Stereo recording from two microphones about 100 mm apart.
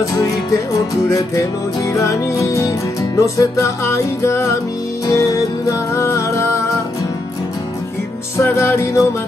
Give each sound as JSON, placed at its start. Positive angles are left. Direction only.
{"t": 2.0, "sound": "music", "side_deg": 30}
{"t": 8.4, "sound": "music", "side_deg": 25}